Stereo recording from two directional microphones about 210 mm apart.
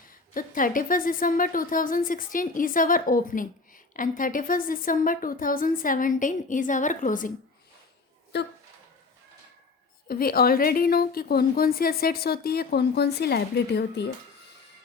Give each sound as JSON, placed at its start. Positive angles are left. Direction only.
{"t": 0.1, "sound": "speech", "side_deg": 40}
{"t": 8.3, "sound": "speech", "side_deg": 55}
{"t": 10.1, "sound": "a woman's voice", "side_deg": 45}